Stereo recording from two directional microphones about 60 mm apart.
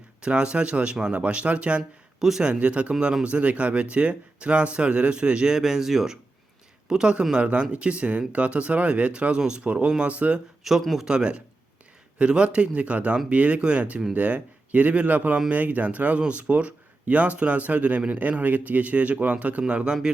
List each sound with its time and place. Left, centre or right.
0.2 s speech: centre
2.1 s a man's voice: centre
10.6 s a man's voice: centre